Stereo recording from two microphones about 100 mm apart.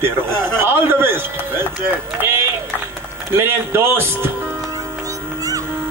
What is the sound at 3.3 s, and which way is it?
Speech, 25° right (ahead or behind).